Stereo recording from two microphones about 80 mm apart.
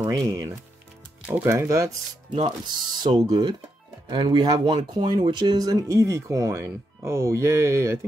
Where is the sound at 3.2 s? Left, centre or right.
Right.